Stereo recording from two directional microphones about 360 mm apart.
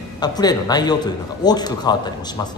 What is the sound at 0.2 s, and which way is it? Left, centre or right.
A man's voice, centre.